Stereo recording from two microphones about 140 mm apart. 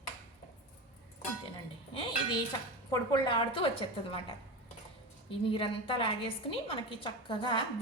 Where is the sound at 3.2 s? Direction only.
35° left (ahead or behind).